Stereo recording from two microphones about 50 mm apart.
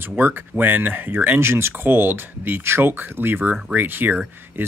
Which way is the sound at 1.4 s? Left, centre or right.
Right.